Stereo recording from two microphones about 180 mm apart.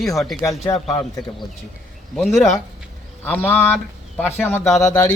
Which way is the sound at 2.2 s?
Centre (ahead or behind).